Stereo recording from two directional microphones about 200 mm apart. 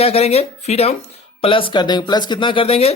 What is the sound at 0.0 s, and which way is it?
Speech, 30° left (ahead or behind).